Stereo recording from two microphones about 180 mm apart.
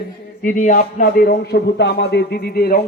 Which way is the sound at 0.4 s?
50° left (ahead or behind).